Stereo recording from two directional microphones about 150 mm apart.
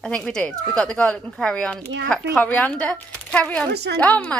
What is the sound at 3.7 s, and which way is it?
Speech, 90° right.